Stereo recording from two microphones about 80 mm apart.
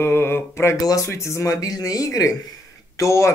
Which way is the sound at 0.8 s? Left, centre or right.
Left.